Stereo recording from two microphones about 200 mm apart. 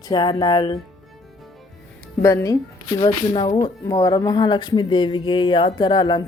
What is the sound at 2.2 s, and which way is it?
A woman's voice, 15° left (ahead or behind).